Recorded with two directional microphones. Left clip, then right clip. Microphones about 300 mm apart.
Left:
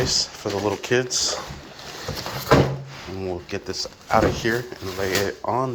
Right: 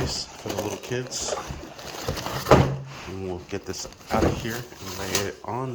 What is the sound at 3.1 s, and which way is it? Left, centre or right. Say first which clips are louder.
Speech: left 4 dB; centre.